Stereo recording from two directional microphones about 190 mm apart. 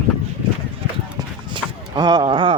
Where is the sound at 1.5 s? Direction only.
20° right (ahead or behind).